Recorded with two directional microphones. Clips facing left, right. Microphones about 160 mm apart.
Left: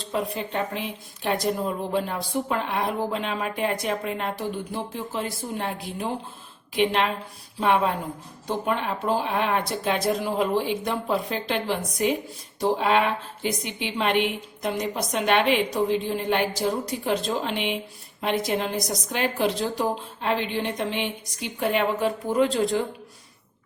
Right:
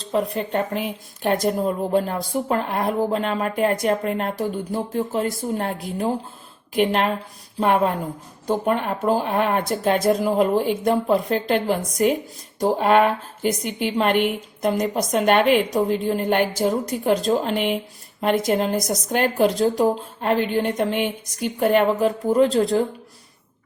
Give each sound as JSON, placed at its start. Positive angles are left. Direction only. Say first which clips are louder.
{"t": 0.3, "sound": "speech", "louder": "right 5 dB", "side_deg": -50}
{"t": 22.3, "sound": "speech", "louder": "right 5 dB", "side_deg": -35}